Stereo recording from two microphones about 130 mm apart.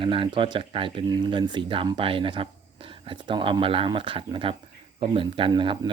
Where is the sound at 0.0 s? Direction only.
40° right (ahead or behind).